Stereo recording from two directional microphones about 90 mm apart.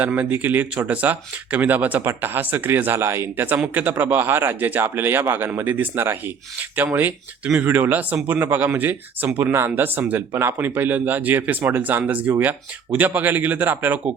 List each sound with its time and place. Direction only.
0.0 s speech: 20° right (ahead or behind)